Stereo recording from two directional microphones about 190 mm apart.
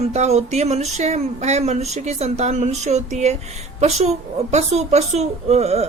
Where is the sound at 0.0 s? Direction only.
35° right (ahead or behind).